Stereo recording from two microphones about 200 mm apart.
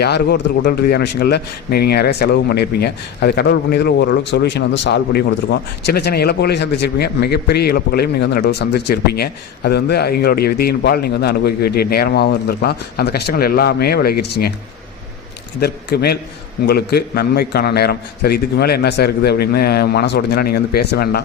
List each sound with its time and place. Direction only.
0.0 s speech: 55° left (ahead or behind)
15.6 s speech: 55° left (ahead or behind)